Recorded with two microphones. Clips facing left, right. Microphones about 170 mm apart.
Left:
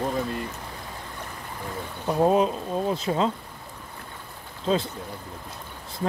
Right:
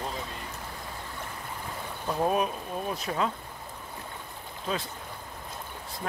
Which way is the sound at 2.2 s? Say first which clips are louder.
Left 7 dB; 25° left (ahead or behind).